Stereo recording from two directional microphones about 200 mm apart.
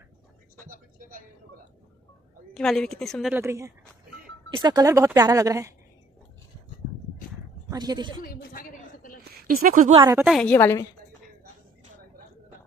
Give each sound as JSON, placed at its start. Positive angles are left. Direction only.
{"t": 2.5, "sound": "a woman's voice", "side_deg": 0}
{"t": 3.3, "sound": "speech", "side_deg": -15}
{"t": 7.7, "sound": "a woman's voice", "side_deg": -20}
{"t": 8.2, "sound": "a sound", "side_deg": 45}
{"t": 9.2, "sound": "a sound", "side_deg": -50}
{"t": 10.0, "sound": "speech", "side_deg": -10}
{"t": 10.3, "sound": "a woman's voice", "side_deg": 5}